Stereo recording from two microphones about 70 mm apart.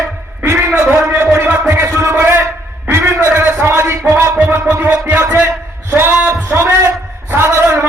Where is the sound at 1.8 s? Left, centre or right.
Right.